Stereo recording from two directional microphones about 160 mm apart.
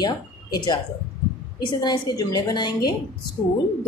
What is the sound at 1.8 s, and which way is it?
Speech, 25° left (ahead or behind).